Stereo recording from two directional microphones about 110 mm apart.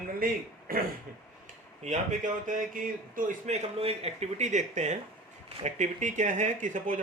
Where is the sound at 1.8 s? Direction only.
90° right.